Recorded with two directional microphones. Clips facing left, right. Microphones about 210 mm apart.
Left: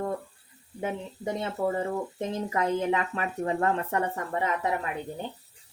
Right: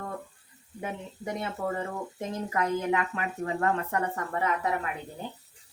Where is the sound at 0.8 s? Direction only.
25° left (ahead or behind).